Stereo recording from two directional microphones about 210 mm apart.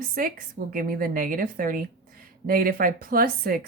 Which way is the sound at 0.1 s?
40° right (ahead or behind).